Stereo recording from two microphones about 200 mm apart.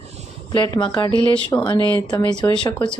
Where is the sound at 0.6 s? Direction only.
20° left (ahead or behind).